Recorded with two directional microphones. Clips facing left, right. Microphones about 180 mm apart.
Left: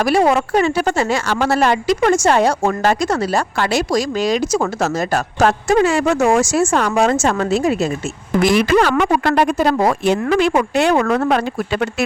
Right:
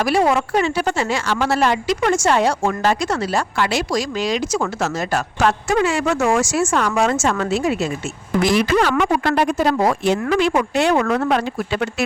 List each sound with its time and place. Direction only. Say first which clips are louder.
0.0 s a woman's voice: left 2 dB; 45° left (ahead or behind)
8.4 s speech: left 3 dB; 55° left (ahead or behind)